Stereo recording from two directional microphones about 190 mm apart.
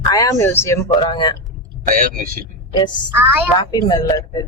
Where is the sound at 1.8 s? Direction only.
45° right (ahead or behind).